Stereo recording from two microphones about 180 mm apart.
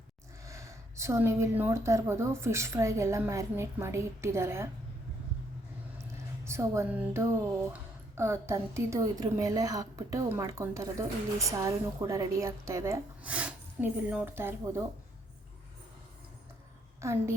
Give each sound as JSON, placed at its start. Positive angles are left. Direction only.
{"t": 0.4, "sound": "speech", "side_deg": -15}
{"t": 6.4, "sound": "speech", "side_deg": -15}
{"t": 17.0, "sound": "speech", "side_deg": -15}